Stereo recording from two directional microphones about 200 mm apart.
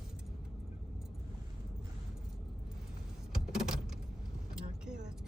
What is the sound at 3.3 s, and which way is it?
Vehicle, 5° right (ahead or behind).